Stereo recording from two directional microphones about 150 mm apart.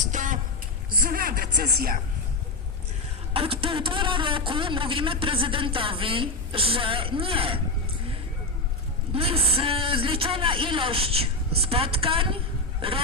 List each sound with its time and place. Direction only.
0.0 s a sound: 60° right (ahead or behind)
0.9 s a woman's voice: 75° right (ahead or behind)
3.3 s a man's voice: 40° right (ahead or behind)
9.1 s a man's voice: 40° right (ahead or behind)